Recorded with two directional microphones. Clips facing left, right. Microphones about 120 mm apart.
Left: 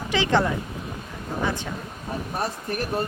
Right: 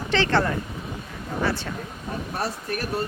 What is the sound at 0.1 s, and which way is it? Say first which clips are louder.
Speech: even; 15° left (ahead or behind).